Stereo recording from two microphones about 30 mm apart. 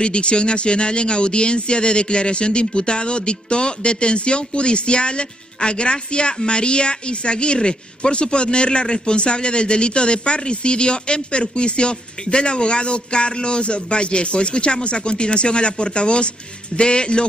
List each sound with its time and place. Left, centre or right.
0.0 s speech: left